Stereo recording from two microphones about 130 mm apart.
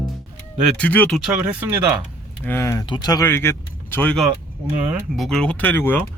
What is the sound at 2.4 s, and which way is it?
Speech, 20° left (ahead or behind).